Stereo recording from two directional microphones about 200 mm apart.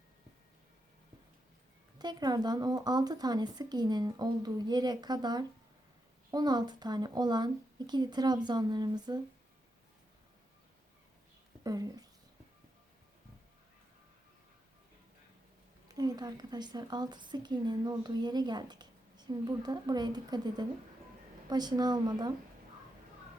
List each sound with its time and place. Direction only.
2.0 s a woman's voice: 20° right (ahead or behind)
11.6 s speech: 20° right (ahead or behind)
16.0 s a woman's voice: 20° right (ahead or behind)